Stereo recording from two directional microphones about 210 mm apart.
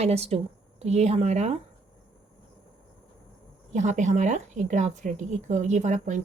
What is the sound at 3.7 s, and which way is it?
A woman's voice, 35° right (ahead or behind).